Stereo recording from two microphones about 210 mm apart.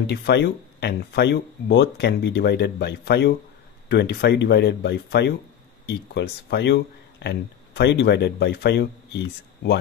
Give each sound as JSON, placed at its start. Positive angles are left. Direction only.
{"t": 0.0, "sound": "speech", "side_deg": 50}